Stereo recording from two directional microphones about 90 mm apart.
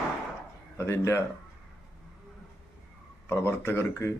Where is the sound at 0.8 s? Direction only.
30° left (ahead or behind).